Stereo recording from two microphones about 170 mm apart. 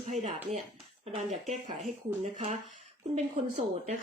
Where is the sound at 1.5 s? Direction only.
50° right (ahead or behind).